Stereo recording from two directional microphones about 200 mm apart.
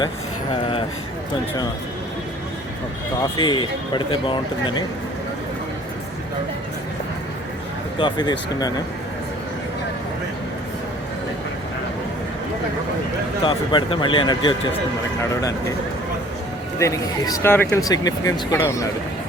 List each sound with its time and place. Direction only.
0.5 s speech: 25° left (ahead or behind)
3.3 s speech: 25° left (ahead or behind)
7.9 s speech: 25° left (ahead or behind)
13.4 s speech: 25° left (ahead or behind)
16.7 s speech: 15° left (ahead or behind)